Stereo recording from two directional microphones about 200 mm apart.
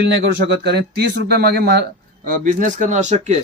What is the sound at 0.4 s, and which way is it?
Speech, 55° right (ahead or behind).